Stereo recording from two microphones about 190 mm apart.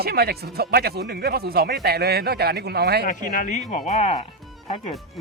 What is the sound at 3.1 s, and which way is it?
Speech, 45° left (ahead or behind).